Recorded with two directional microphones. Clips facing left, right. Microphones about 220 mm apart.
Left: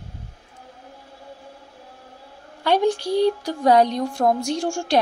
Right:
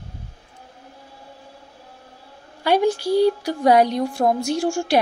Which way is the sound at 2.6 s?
10° right (ahead or behind).